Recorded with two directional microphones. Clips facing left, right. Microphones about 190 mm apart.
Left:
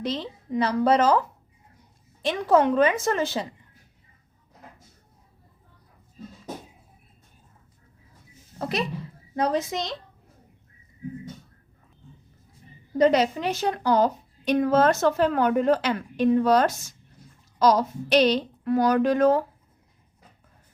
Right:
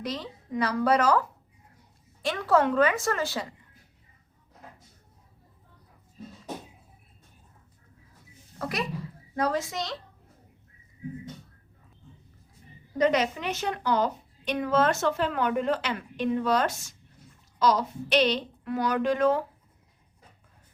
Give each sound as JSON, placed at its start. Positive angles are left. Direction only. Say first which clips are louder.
{"t": 0.0, "sound": "a woman's voice", "louder": "left 4 dB", "side_deg": 25}
{"t": 2.2, "sound": "a woman's voice", "louder": "left 3 dB", "side_deg": 20}
{"t": 8.5, "sound": "a woman's voice", "louder": "left 3 dB", "side_deg": 25}
{"t": 13.0, "sound": "a woman's voice", "louder": "left 4 dB", "side_deg": 30}